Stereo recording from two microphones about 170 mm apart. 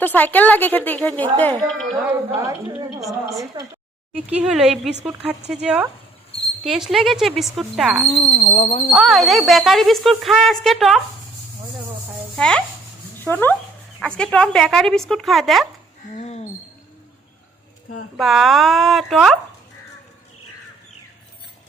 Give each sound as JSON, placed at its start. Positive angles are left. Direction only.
{"t": 0.0, "sound": "a woman's voice", "side_deg": 10}
{"t": 2.0, "sound": "a woman's voice", "side_deg": -15}
{"t": 4.1, "sound": "speech", "side_deg": -10}
{"t": 8.1, "sound": "speech", "side_deg": 40}
{"t": 8.9, "sound": "speech", "side_deg": 0}
{"t": 12.4, "sound": "speech", "side_deg": 5}
{"t": 16.1, "sound": "speech", "side_deg": 40}
{"t": 18.2, "sound": "speech", "side_deg": 0}